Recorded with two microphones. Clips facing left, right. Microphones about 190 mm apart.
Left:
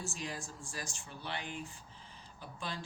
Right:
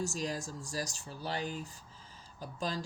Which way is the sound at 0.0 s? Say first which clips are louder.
Right 6 dB; 40° right (ahead or behind).